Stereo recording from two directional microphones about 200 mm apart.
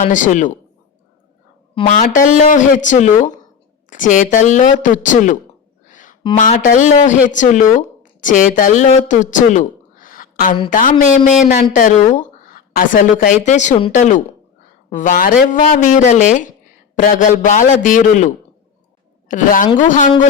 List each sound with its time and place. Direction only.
0.1 s speech: 40° left (ahead or behind)
1.7 s speech: 30° left (ahead or behind)
2.0 s speech: 40° left (ahead or behind)
5.9 s a sound: 40° left (ahead or behind)
6.3 s a woman's voice: 35° left (ahead or behind)